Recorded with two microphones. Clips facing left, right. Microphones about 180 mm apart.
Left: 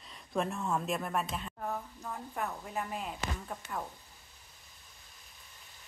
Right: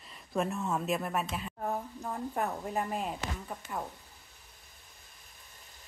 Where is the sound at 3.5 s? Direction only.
10° right (ahead or behind).